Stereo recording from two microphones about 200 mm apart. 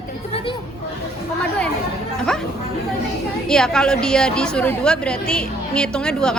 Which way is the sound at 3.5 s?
5° left (ahead or behind).